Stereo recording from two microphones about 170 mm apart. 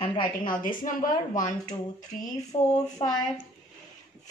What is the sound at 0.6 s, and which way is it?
Speech, 50° left (ahead or behind).